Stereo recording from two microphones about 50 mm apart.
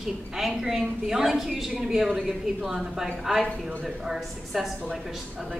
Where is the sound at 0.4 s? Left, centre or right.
Centre.